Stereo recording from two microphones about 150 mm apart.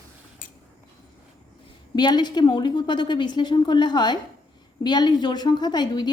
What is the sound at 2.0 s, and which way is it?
A woman's voice, 30° left (ahead or behind).